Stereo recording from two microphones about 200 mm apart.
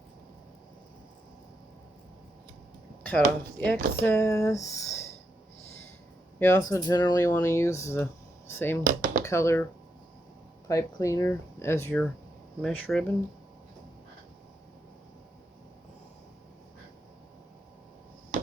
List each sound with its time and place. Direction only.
3.0 s speech: 5° left (ahead or behind)
6.4 s speech: 15° left (ahead or behind)
8.8 s a sound: 45° right (ahead or behind)
9.2 s speech: 15° left (ahead or behind)
10.7 s speech: 15° left (ahead or behind)